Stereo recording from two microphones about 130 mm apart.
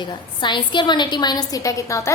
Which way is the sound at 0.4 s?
35° left (ahead or behind).